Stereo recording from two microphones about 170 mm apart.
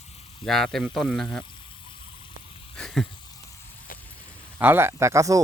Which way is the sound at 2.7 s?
5° left (ahead or behind).